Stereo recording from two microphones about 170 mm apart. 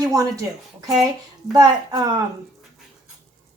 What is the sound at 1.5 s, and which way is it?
Speech, 20° right (ahead or behind).